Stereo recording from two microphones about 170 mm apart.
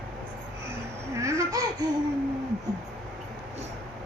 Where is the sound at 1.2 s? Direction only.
20° right (ahead or behind).